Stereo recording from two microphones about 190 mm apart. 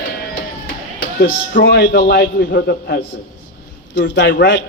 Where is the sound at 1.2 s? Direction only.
50° left (ahead or behind).